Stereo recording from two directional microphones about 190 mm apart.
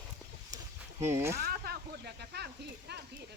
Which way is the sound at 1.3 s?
55° right (ahead or behind).